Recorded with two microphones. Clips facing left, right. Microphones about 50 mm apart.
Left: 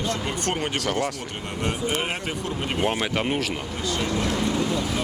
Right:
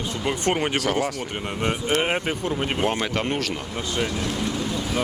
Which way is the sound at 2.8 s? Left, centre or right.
Centre.